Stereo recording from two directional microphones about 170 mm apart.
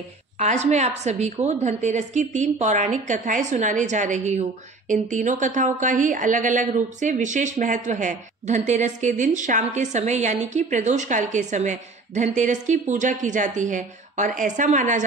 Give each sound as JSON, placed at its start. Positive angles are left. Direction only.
{"t": 0.4, "sound": "a woman's voice", "side_deg": -40}